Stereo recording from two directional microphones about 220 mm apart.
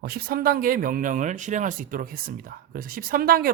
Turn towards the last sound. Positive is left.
turn(degrees=-40)  # may be behind; listen again after turning